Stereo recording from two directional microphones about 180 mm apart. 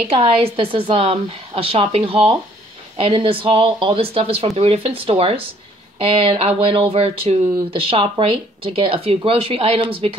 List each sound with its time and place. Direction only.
0.0 s speech: 30° right (ahead or behind)